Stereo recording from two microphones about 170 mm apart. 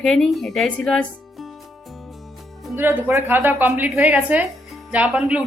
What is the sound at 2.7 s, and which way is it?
A woman's voice, 15° right (ahead or behind).